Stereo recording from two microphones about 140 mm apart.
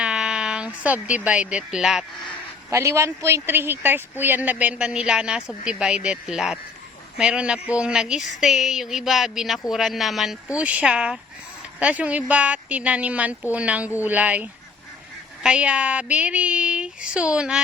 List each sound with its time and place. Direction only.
0.0 s a sound: 5° right (ahead or behind)
1.0 s speech: 10° right (ahead or behind)
2.6 s speech: 20° right (ahead or behind)